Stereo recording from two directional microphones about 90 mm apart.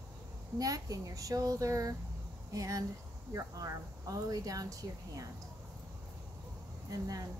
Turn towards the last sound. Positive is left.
turn(degrees=-40)  # may be behind; listen again after turning